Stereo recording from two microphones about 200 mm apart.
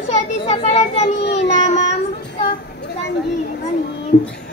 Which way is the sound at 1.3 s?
35° left (ahead or behind).